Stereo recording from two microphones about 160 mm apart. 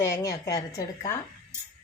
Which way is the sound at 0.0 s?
20° left (ahead or behind).